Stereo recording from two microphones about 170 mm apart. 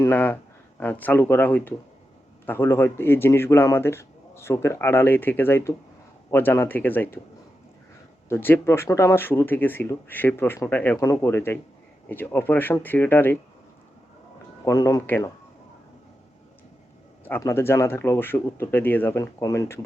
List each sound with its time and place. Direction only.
0.0 s speech: 10° left (ahead or behind)
8.3 s speech: 15° left (ahead or behind)
14.6 s speech: 20° left (ahead or behind)
17.2 s speech: 15° left (ahead or behind)